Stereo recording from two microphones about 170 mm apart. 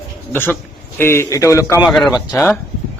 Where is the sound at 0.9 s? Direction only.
15° left (ahead or behind).